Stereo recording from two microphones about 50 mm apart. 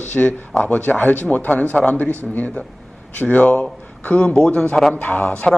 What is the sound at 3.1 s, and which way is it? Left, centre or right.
Speech, left.